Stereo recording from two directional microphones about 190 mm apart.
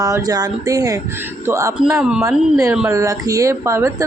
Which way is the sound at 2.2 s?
15° right (ahead or behind).